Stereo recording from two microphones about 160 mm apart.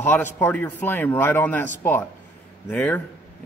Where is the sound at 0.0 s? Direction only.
15° left (ahead or behind).